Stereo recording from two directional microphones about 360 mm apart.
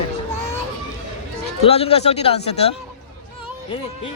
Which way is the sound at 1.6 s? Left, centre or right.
Centre.